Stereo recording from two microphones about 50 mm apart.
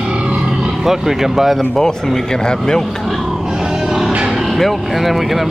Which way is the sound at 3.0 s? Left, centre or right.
Centre.